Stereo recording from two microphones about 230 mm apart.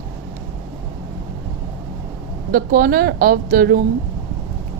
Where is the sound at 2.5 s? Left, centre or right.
Right.